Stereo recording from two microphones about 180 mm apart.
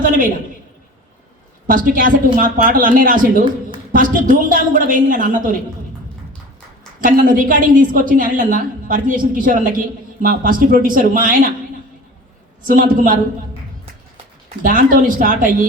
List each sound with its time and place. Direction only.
1.6 s a woman's voice: 50° right (ahead or behind)
7.0 s a woman's voice: 50° right (ahead or behind)
12.6 s a woman's voice: 50° right (ahead or behind)
14.6 s a woman's voice: 50° right (ahead or behind)